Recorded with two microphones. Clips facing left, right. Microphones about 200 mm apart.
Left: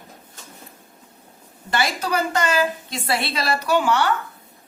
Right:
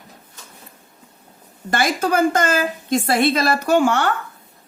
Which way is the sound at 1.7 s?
50° right (ahead or behind).